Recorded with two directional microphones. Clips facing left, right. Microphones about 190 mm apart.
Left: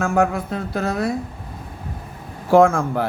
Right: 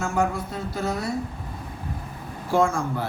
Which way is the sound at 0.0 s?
60° left (ahead or behind).